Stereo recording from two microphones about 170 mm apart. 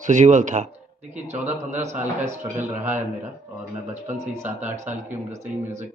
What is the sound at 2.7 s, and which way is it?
Speech, 10° right (ahead or behind).